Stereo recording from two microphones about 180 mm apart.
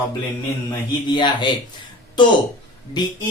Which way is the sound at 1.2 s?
25° left (ahead or behind).